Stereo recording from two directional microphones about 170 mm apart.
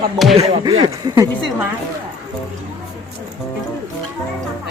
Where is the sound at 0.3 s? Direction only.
35° right (ahead or behind).